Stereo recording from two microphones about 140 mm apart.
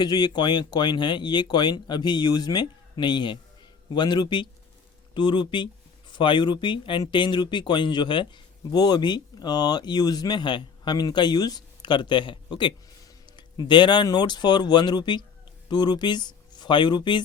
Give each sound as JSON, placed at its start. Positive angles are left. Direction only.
{"t": 0.0, "sound": "speech", "side_deg": 30}